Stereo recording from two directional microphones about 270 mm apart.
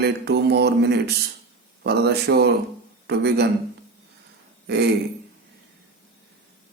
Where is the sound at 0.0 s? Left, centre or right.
Right.